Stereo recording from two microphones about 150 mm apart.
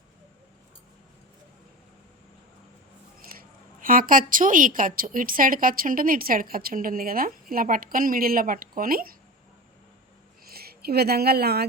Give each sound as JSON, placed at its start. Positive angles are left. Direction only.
{"t": 3.2, "sound": "a woman's voice", "side_deg": -75}
{"t": 10.4, "sound": "speech", "side_deg": -90}